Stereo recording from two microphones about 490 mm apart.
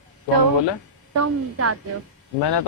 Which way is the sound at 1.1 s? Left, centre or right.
Right.